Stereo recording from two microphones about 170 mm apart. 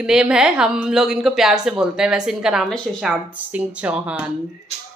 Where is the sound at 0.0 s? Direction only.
5° right (ahead or behind).